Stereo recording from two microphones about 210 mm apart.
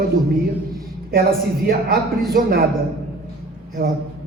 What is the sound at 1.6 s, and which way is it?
Speech, 45° right (ahead or behind).